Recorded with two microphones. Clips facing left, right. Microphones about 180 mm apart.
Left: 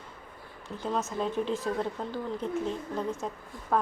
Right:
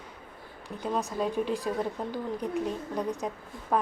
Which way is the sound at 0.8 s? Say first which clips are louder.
Right 1 dB; 15° right (ahead or behind).